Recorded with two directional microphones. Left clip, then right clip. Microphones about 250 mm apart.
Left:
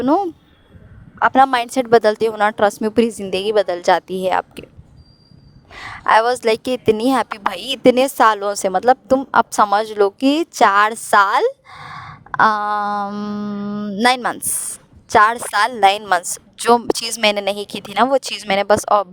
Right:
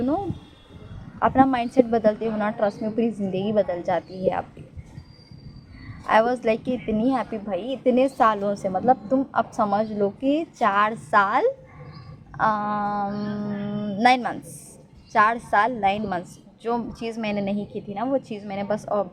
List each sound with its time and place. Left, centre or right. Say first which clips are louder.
1.2 s a woman's voice: left 6 dB; left
6.1 s a woman's voice: left 6 dB; left
12.3 s mantra: left 8 dB; left
15.1 s a woman's voice: left 6 dB; left